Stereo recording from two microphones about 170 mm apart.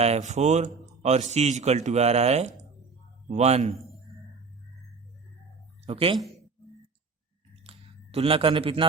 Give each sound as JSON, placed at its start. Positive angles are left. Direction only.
{"t": 0.0, "sound": "speech", "side_deg": -40}
{"t": 5.8, "sound": "a woman's voice", "side_deg": -35}
{"t": 7.5, "sound": "a sound", "side_deg": -35}